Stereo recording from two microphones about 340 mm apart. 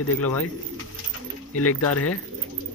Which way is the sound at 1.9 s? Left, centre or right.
Left.